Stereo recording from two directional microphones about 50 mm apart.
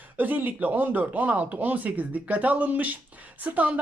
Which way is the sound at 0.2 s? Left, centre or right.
Right.